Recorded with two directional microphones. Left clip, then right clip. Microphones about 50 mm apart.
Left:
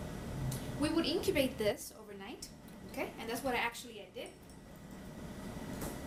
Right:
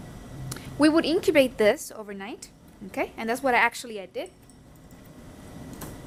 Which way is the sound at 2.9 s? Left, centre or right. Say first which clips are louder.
Right 11 dB; right.